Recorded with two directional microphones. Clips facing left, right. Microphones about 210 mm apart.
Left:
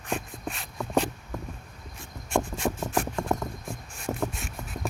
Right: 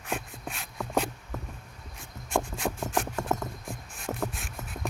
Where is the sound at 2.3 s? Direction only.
Centre (ahead or behind).